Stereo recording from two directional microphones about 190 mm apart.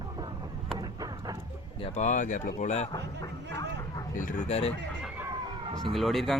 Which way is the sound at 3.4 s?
65° right (ahead or behind).